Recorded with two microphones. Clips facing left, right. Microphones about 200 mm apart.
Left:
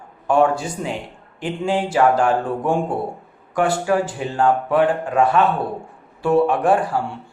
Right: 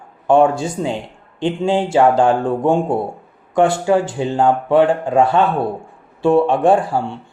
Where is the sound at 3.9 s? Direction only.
25° right (ahead or behind).